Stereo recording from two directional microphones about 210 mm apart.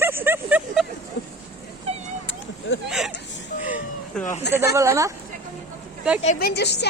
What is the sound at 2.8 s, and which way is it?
Speech, centre (ahead or behind).